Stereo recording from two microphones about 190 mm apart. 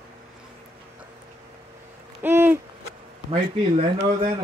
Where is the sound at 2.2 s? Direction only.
10° right (ahead or behind).